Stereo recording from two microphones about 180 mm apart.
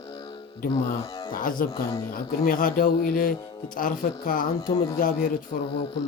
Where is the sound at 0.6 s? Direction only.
50° left (ahead or behind).